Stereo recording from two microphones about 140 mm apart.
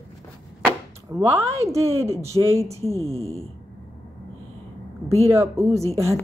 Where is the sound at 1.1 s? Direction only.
20° right (ahead or behind).